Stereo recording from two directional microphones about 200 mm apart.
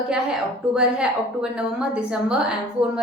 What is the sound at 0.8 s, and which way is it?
A woman's voice, 5° right (ahead or behind).